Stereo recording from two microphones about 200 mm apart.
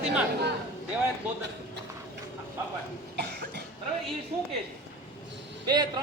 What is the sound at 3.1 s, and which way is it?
Cough, 55° right (ahead or behind).